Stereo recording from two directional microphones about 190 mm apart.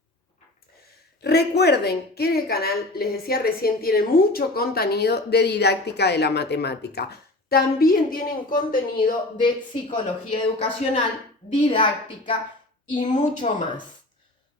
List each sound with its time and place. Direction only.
1.2 s a woman's voice: 60° left (ahead or behind)
9.4 s a woman's voice: 25° left (ahead or behind)
13.1 s speech: 40° left (ahead or behind)